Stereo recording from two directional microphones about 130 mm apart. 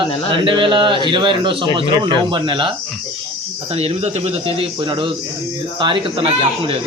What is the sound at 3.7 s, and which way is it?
A man's voice, 55° right (ahead or behind).